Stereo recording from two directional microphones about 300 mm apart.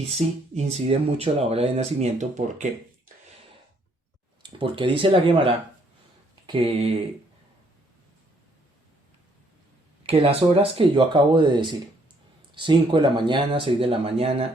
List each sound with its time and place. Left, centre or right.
0.2 s speech: right
4.4 s speech: centre
10.1 s speech: centre